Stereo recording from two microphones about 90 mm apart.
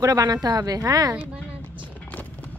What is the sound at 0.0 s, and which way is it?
Speech, 40° right (ahead or behind).